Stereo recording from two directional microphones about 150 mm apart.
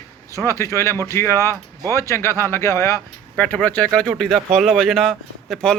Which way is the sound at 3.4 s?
10° left (ahead or behind).